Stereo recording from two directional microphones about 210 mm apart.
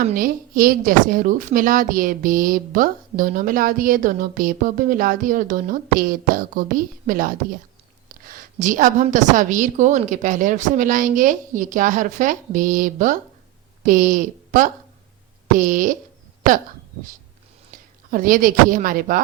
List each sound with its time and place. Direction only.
0.1 s a woman's voice: 40° right (ahead or behind)
18.1 s a woman's voice: 40° right (ahead or behind)